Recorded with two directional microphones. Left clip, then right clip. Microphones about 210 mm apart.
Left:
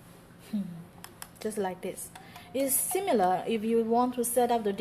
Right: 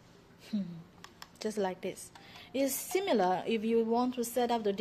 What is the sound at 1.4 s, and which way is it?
A woman's voice, 40° right (ahead or behind).